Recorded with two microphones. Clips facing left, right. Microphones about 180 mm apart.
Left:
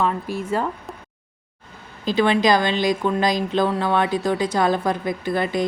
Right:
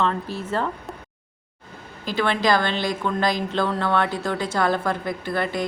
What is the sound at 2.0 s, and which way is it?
A woman's voice, 15° left (ahead or behind).